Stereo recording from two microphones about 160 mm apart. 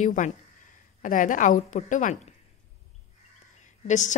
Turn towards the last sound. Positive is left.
turn(degrees=50)  # may be behind; listen again after turning